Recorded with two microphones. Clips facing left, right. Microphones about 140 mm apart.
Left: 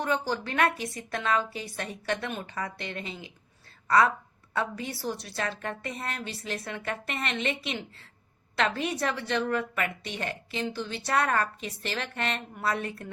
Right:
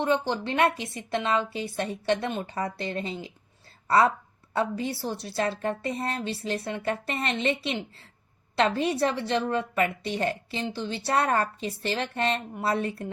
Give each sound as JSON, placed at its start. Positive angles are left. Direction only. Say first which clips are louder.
{"t": 0.0, "sound": "a woman's voice", "louder": "right 3 dB", "side_deg": -25}
{"t": 8.8, "sound": "a woman's voice", "louder": "right 5 dB", "side_deg": -30}